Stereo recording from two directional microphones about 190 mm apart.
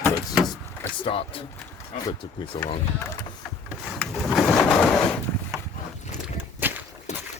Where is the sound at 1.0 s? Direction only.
30° left (ahead or behind).